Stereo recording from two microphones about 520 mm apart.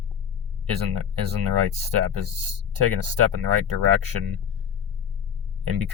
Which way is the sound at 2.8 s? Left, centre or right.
Right.